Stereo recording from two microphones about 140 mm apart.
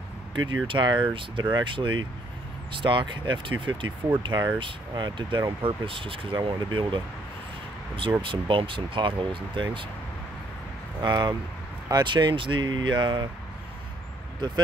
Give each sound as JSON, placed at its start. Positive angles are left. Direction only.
{"t": 0.3, "sound": "speech", "side_deg": -35}
{"t": 11.0, "sound": "speech", "side_deg": -30}